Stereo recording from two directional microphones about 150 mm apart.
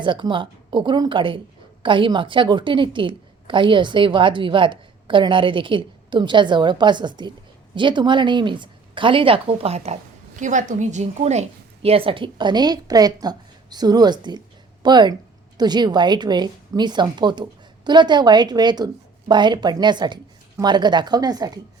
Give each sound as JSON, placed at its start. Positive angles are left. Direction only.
{"t": 0.0, "sound": "a woman's voice", "side_deg": -30}